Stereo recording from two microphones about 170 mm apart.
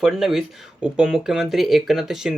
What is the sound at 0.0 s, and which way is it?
Speech, centre (ahead or behind).